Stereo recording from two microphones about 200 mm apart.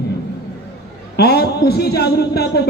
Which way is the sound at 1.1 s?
50° left (ahead or behind).